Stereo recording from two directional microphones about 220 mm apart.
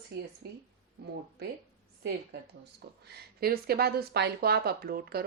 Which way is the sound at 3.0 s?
45° right (ahead or behind).